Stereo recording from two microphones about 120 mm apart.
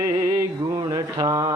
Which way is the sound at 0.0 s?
30° right (ahead or behind).